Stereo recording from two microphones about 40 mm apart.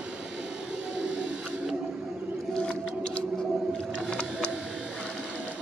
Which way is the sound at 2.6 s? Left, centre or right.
Left.